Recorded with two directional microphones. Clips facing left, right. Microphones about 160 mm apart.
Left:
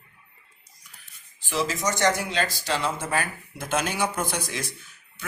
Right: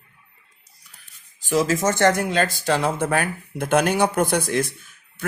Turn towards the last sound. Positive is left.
turn(degrees=-50)  # may be behind; listen again after turning